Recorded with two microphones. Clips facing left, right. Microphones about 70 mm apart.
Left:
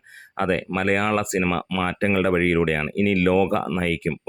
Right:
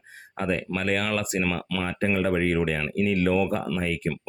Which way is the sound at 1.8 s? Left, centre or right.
Left.